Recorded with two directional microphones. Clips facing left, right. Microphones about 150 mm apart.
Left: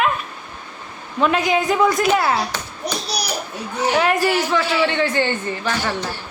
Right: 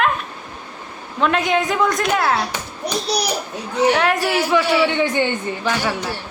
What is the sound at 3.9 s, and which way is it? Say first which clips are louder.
A man's voice: left 1 dB; centre (ahead or behind).